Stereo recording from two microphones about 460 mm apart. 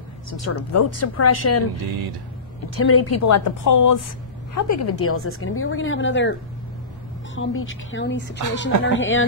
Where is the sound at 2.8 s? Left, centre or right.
Left.